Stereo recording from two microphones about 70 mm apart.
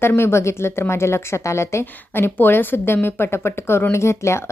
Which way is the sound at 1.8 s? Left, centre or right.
Left.